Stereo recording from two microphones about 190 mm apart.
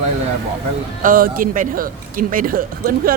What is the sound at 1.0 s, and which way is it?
Speech, 45° right (ahead or behind).